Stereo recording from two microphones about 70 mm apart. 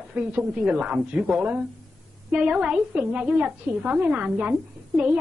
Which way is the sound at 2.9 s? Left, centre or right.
Right.